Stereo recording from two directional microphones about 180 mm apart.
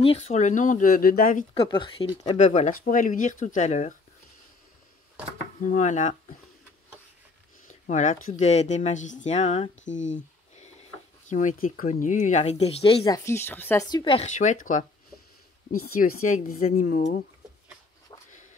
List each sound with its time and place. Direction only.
0.0 s speech: 35° left (ahead or behind); by 1.4 s 50° left (ahead or behind)
1.5 s speech: 30° left (ahead or behind)
2.2 s speech: 40° left (ahead or behind)
5.6 s speech: 45° left (ahead or behind)
7.8 s speech: 45° left (ahead or behind)
10.1 s a sound: 40° left (ahead or behind)
11.2 s speech: 45° left (ahead or behind)
13.0 s speech: 15° left (ahead or behind)
13.8 s speech: 25° left (ahead or behind); by 17.2 s 45° left (ahead or behind)